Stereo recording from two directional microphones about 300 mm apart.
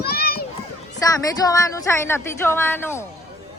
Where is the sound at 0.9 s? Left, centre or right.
Centre.